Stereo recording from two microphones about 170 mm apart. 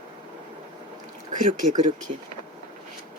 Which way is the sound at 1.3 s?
50° right (ahead or behind).